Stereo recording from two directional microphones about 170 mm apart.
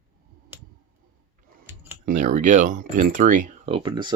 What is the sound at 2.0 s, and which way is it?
Speech, 50° right (ahead or behind).